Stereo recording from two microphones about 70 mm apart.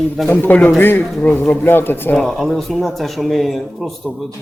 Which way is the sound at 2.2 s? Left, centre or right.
Centre.